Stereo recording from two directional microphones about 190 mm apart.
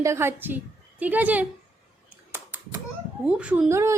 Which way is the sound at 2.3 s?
10° right (ahead or behind).